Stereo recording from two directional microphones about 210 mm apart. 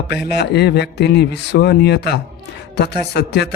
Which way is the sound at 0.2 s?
50° left (ahead or behind).